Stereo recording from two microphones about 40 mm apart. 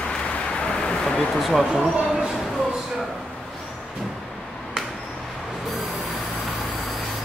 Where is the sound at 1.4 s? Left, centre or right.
Centre.